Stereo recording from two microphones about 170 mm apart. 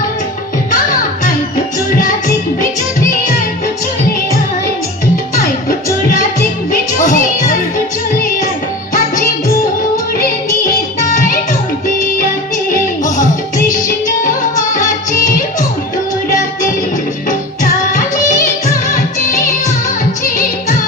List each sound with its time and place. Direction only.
7.0 s music: 50° left (ahead or behind)
14.3 s music: 50° left (ahead or behind)